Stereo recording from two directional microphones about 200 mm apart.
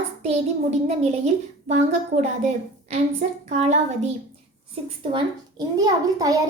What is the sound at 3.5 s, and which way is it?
Speech, 35° right (ahead or behind).